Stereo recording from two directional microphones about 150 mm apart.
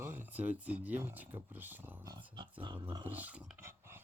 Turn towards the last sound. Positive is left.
turn(degrees=-15)  # may be behind; listen again after turning